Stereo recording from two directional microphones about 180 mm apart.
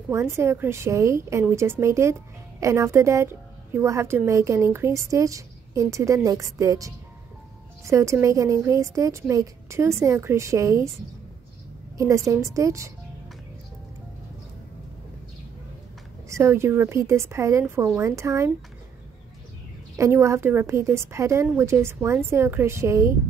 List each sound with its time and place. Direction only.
0.1 s a woman's voice: 15° right (ahead or behind)
12.0 s a woman's voice: 15° right (ahead or behind)
16.3 s a woman's voice: 15° right (ahead or behind)
20.0 s a woman's voice: 15° right (ahead or behind)